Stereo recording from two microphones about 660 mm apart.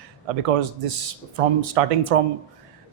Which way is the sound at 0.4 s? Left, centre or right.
Right.